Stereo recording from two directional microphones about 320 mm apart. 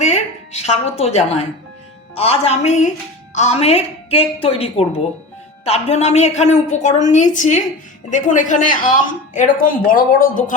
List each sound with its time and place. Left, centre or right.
0.0 s a woman's voice: left